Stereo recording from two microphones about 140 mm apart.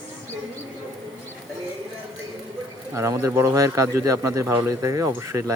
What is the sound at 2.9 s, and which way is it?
A man's voice, 20° right (ahead or behind).